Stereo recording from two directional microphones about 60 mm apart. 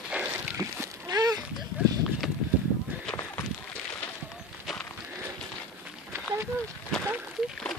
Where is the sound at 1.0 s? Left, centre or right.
Right.